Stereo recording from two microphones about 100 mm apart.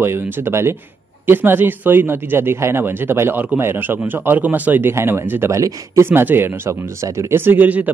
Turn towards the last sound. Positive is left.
turn(degrees=-15)  # may be behind; listen again after turning